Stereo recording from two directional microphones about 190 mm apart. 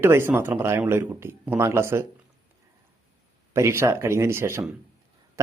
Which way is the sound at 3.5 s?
15° right (ahead or behind).